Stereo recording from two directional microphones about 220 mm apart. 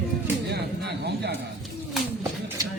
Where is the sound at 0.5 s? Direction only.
50° right (ahead or behind).